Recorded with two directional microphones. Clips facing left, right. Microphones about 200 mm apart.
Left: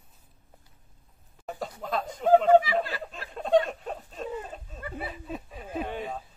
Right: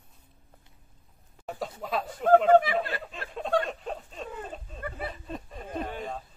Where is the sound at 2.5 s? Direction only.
55° right (ahead or behind).